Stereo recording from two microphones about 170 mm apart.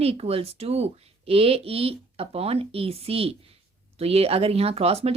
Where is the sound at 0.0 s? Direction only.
35° right (ahead or behind).